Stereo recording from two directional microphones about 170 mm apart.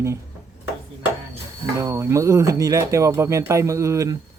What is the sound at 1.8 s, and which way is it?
Speech, 15° right (ahead or behind).